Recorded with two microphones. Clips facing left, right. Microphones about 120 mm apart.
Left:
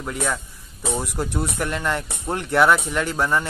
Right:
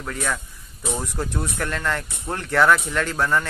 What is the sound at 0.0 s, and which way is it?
Speech, 15° left (ahead or behind).